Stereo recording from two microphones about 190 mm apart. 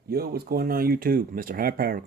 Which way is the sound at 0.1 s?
55° right (ahead or behind).